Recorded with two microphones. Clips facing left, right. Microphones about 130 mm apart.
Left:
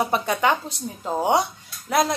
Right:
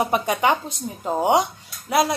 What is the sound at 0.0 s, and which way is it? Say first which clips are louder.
Speech: right 1 dB; 15° right (ahead or behind).